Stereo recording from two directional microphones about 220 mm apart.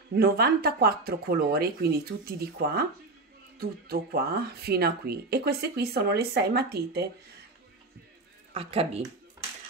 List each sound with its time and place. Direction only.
0.1 s speech: 45° right (ahead or behind)
8.5 s speech: 25° right (ahead or behind)